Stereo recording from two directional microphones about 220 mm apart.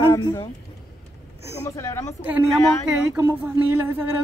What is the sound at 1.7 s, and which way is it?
Speech, 15° left (ahead or behind).